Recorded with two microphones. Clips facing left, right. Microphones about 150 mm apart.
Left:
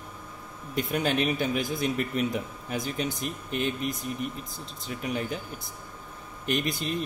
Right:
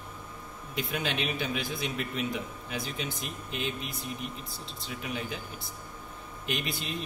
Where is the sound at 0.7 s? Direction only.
45° left (ahead or behind).